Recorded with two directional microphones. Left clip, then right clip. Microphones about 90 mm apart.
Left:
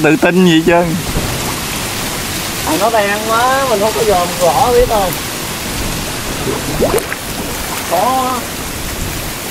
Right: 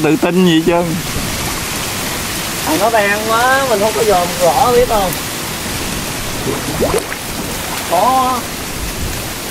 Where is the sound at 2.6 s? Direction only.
40° right (ahead or behind).